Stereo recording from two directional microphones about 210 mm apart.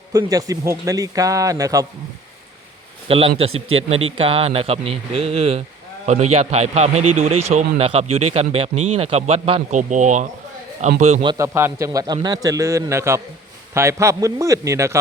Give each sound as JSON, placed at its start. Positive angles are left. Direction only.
{"t": 0.1, "sound": "speech", "side_deg": -15}
{"t": 3.1, "sound": "speech", "side_deg": -25}
{"t": 11.1, "sound": "speech", "side_deg": -25}
{"t": 11.4, "sound": "speech", "side_deg": -10}